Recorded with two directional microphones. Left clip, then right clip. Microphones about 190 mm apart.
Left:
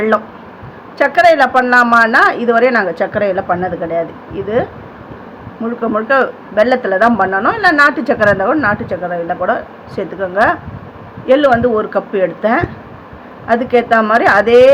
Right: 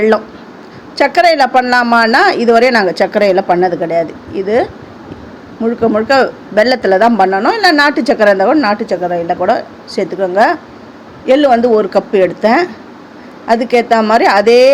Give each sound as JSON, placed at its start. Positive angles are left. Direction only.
{"t": 0.9, "sound": "a man's voice", "side_deg": -30}
{"t": 5.6, "sound": "a man's voice", "side_deg": -25}